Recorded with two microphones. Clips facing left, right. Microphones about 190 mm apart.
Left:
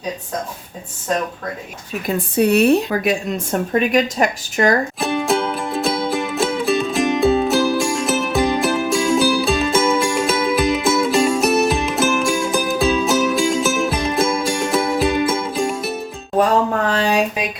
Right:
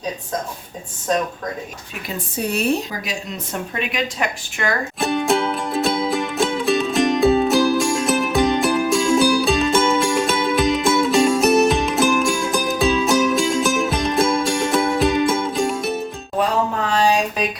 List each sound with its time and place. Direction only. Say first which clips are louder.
2.3 s speech: left 7 dB; 65° left (ahead or behind); by 4.7 s 40° left (ahead or behind)
4.9 s music: even; centre (ahead or behind)
16.4 s a sound: left 4 dB; 55° left (ahead or behind)